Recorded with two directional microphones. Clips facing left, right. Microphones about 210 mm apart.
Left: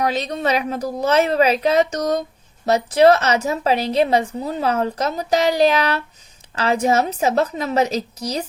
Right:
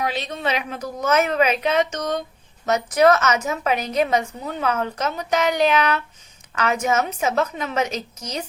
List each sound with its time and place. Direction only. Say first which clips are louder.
0.0 s a woman's voice: left 4 dB; 40° left (ahead or behind)